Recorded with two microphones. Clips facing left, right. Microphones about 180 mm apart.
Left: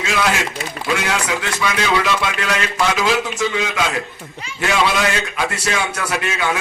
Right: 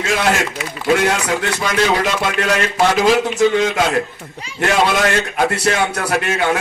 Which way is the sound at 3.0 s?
40° right (ahead or behind).